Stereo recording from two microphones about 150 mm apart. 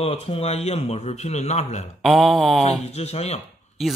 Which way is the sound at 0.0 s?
40° left (ahead or behind).